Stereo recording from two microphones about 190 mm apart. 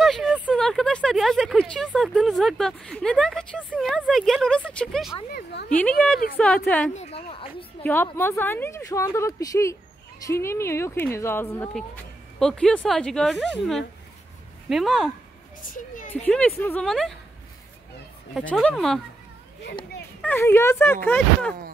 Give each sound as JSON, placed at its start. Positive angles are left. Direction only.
{"t": 0.0, "sound": "a sound", "side_deg": 0}
{"t": 1.9, "sound": "speech", "side_deg": 0}
{"t": 5.3, "sound": "a woman's voice", "side_deg": 60}
{"t": 5.8, "sound": "speech", "side_deg": 5}
{"t": 6.8, "sound": "speech", "side_deg": 35}
{"t": 7.8, "sound": "speech", "side_deg": 10}
{"t": 15.6, "sound": "speech", "side_deg": 45}
{"t": 16.2, "sound": "speech", "side_deg": 5}
{"t": 18.3, "sound": "speech", "side_deg": 5}
{"t": 20.2, "sound": "speech", "side_deg": 10}